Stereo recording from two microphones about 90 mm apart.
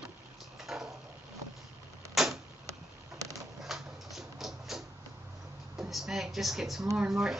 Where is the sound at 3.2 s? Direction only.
40° right (ahead or behind).